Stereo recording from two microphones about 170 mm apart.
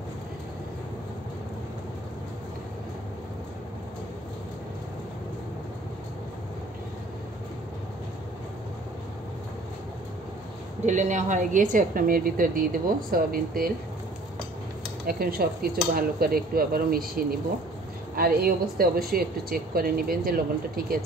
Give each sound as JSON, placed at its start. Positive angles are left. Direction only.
{"t": 10.9, "sound": "a woman's voice", "side_deg": -45}
{"t": 15.0, "sound": "a woman's voice", "side_deg": -60}
{"t": 18.1, "sound": "a woman's voice", "side_deg": -60}